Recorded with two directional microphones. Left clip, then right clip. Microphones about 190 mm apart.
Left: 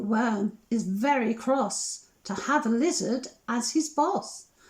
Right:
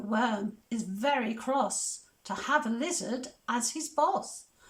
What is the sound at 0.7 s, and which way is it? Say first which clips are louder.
Speech: left 3 dB; 25° left (ahead or behind).